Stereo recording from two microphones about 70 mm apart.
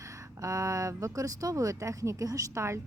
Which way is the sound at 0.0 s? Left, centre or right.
Right.